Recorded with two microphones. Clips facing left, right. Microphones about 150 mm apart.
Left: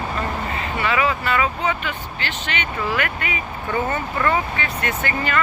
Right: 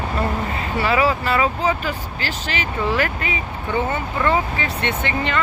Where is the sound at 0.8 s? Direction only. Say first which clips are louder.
Right 2 dB; 35° right (ahead or behind).